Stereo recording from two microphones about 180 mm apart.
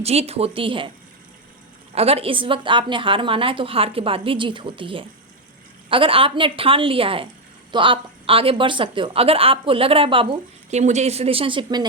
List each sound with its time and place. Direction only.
0.0 s a woman's voice: 35° right (ahead or behind)
2.0 s a woman's voice: 35° right (ahead or behind)